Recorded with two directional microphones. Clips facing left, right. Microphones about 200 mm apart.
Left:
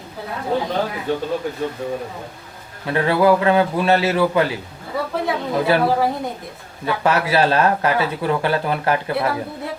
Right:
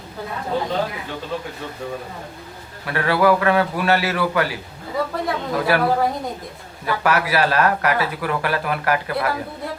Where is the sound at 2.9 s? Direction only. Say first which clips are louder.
Left 2 dB; 25° left (ahead or behind).